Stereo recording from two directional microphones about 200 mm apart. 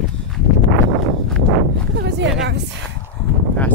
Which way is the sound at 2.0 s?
55° right (ahead or behind).